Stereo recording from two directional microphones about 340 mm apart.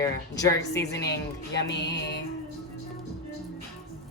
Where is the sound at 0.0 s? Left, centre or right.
Centre.